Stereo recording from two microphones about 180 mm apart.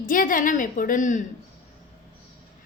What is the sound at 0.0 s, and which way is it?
A woman's voice, 50° left (ahead or behind).